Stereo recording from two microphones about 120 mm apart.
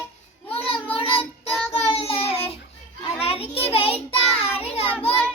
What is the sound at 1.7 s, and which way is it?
Child singing, 55° left (ahead or behind).